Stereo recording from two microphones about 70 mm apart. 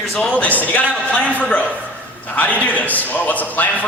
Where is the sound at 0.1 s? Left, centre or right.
Centre.